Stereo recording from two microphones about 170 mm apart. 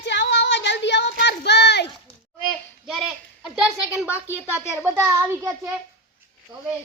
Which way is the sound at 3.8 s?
10° right (ahead or behind).